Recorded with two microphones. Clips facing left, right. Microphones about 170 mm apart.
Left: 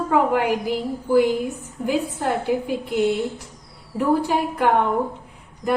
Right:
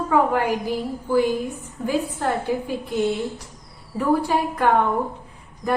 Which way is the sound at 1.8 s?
15° left (ahead or behind).